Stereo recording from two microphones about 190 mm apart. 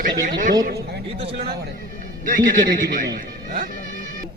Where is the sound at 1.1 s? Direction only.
30° right (ahead or behind).